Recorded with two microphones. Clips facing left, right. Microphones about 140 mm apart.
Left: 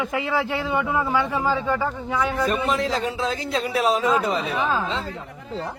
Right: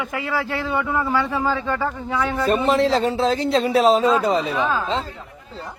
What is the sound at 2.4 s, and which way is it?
Speech, 35° right (ahead or behind).